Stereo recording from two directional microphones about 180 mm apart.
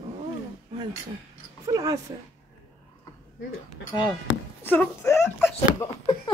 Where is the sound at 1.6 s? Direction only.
20° right (ahead or behind).